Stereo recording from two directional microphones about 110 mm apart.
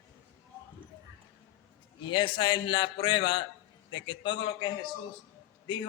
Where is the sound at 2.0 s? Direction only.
45° left (ahead or behind).